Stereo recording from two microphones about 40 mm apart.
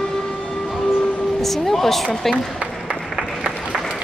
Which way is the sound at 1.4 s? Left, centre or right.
Centre.